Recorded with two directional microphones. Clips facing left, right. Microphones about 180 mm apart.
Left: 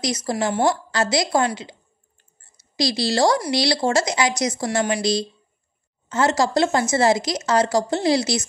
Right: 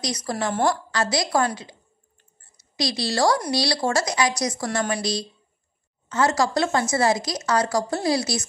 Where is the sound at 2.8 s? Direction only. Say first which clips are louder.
Left 3 dB; 25° left (ahead or behind).